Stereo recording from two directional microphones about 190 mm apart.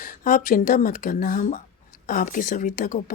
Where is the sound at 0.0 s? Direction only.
45° left (ahead or behind).